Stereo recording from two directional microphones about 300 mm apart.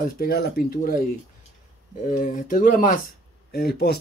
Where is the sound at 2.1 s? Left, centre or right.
Left.